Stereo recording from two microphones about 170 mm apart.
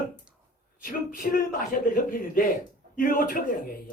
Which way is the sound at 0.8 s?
55° left (ahead or behind).